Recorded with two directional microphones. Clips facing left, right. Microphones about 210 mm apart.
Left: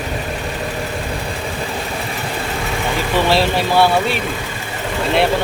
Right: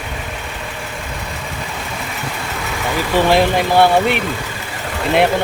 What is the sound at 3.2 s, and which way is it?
Speech, 15° right (ahead or behind).